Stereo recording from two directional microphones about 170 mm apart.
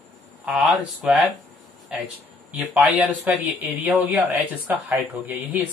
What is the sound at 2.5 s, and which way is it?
Speech, 10° right (ahead or behind).